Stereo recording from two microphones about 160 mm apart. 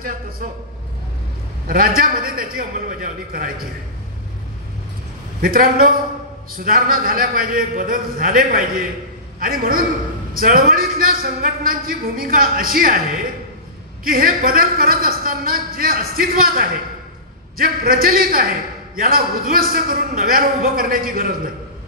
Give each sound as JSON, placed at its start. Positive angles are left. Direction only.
{"t": 1.7, "sound": "a man's voice", "side_deg": -65}
{"t": 5.4, "sound": "a man's voice", "side_deg": -65}
{"t": 14.0, "sound": "a man's voice", "side_deg": -65}